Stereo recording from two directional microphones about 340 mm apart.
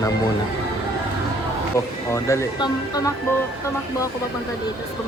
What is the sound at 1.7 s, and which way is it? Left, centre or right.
Speech, centre.